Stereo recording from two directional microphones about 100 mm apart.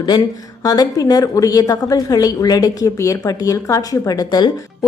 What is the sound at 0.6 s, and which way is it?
A woman's voice, 40° left (ahead or behind).